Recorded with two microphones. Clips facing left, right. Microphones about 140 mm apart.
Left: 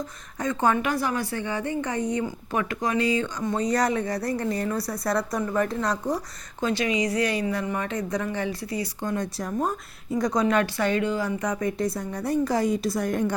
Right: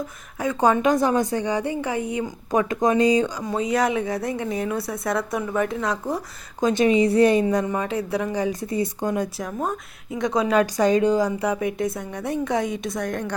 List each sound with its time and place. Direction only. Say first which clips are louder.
0.3 s a woman's voice: right 4 dB; 10° right (ahead or behind)
6.6 s a woman's voice: right 5 dB; 15° right (ahead or behind)
6.8 s a woman's voice: right 10 dB; 25° right (ahead or behind)
7.9 s a woman's voice: right 3 dB; 10° right (ahead or behind)
10.4 s a woman's voice: right 4 dB; 15° right (ahead or behind); by 13.3 s 5° left (ahead or behind)